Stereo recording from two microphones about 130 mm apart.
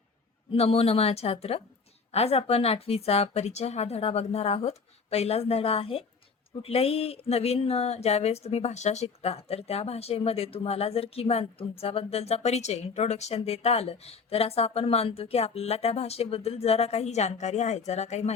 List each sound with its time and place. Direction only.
0.5 s speech: 50° left (ahead or behind)